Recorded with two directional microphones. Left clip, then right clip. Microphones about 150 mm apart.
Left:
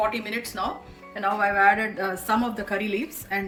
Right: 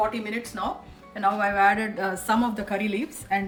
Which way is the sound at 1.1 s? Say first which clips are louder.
Even; 25° right (ahead or behind).